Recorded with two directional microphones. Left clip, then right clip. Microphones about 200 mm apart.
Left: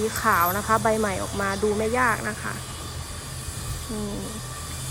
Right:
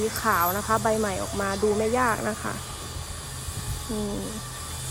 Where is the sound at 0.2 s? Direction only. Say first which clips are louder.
Left 3 dB; centre (ahead or behind).